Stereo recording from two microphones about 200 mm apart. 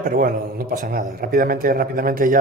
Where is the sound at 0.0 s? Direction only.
45° right (ahead or behind).